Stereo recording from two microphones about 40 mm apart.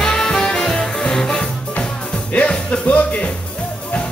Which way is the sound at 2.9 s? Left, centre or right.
Left.